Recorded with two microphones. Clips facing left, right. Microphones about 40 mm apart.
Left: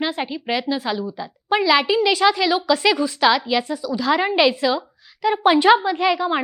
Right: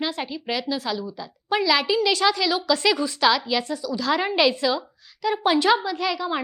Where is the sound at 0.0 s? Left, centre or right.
Centre.